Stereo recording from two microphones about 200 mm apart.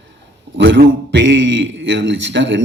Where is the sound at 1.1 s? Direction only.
65° right (ahead or behind).